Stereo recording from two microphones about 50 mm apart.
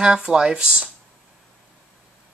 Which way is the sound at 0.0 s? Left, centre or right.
Centre.